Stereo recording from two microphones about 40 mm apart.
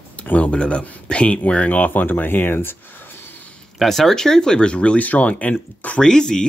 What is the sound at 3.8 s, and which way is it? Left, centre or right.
Speech, centre.